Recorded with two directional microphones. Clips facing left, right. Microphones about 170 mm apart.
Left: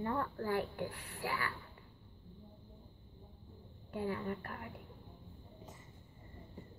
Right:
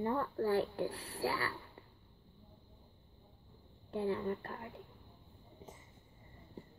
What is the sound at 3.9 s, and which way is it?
Speech, 25° right (ahead or behind).